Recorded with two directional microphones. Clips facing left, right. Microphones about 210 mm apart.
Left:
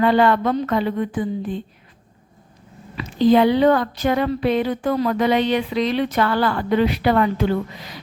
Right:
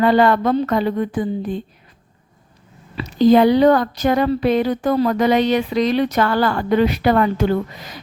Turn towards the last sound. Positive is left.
turn(degrees=-45)  # may be behind; listen again after turning